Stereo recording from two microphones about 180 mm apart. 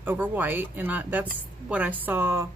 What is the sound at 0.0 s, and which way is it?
Speech, 10° right (ahead or behind).